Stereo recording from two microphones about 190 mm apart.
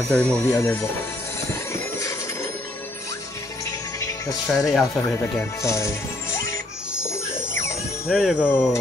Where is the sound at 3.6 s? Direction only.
15° left (ahead or behind).